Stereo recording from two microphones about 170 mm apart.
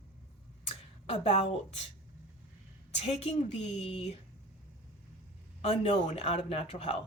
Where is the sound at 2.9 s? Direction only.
40° left (ahead or behind).